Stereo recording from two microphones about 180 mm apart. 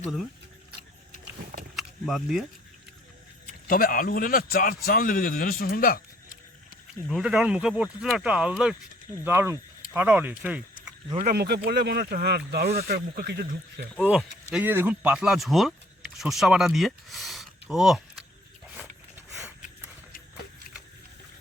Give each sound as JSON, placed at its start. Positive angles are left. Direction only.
{"t": 1.7, "sound": "keys jangling", "side_deg": 0}
{"t": 3.4, "sound": "a man's voice", "side_deg": 55}
{"t": 7.1, "sound": "speech", "side_deg": -5}
{"t": 11.3, "sound": "speech", "side_deg": -65}
{"t": 14.2, "sound": "speech", "side_deg": -5}
{"t": 18.7, "sound": "a sound", "side_deg": -5}